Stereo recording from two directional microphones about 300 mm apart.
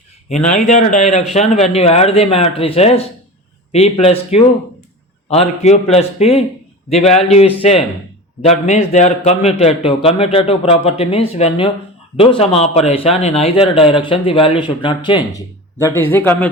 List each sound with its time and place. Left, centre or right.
0.3 s a man's voice: left